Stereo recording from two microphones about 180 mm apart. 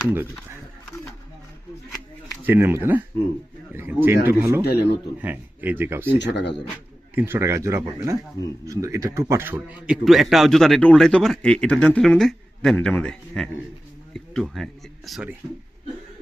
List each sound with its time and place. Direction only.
2.4 s speech: 10° right (ahead or behind)
4.6 s speech: 65° left (ahead or behind)
5.2 s speech: 10° right (ahead or behind)
6.1 s speech: 75° left (ahead or behind)
7.2 s a man's voice: 15° right (ahead or behind)